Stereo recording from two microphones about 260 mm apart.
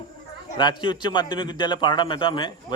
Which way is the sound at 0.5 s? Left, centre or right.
Centre.